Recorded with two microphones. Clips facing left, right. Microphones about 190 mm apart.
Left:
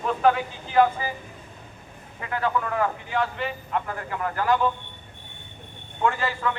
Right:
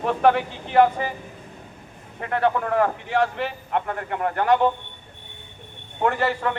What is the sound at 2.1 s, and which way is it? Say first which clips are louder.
A man's voice: right 4 dB; 55° right (ahead or behind).